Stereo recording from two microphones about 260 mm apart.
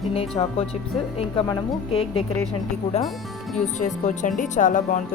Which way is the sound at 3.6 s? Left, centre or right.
Left.